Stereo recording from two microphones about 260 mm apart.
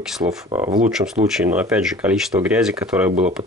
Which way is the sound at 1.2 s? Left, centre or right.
Centre.